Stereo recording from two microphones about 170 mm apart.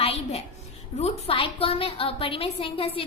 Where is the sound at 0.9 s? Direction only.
35° left (ahead or behind).